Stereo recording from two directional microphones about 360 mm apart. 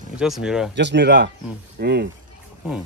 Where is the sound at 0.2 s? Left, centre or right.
Centre.